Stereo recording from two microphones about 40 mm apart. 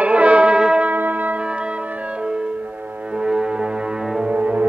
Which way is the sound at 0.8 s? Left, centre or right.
Right.